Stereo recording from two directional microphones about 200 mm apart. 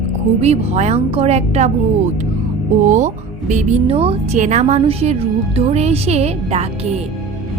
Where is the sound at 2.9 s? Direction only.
35° right (ahead or behind).